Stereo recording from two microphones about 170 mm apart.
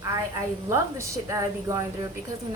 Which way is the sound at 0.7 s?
20° right (ahead or behind).